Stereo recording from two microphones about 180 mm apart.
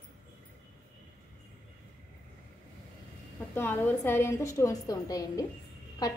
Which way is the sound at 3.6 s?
10° left (ahead or behind).